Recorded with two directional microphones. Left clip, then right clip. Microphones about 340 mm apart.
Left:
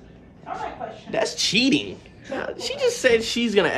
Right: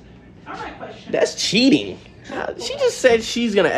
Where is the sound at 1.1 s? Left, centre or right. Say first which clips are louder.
Right 3 dB; centre.